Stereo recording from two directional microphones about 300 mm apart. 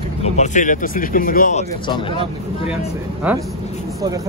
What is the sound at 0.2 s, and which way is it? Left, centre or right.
Speech, left.